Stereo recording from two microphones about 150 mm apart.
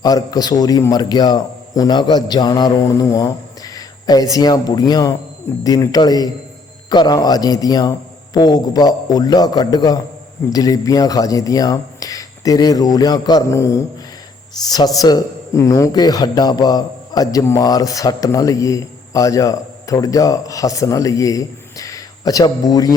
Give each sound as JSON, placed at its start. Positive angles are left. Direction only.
{"t": 0.0, "sound": "speech", "side_deg": 25}
{"t": 14.9, "sound": "speech", "side_deg": 25}